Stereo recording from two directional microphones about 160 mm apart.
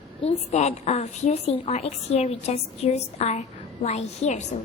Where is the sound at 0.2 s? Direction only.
45° left (ahead or behind).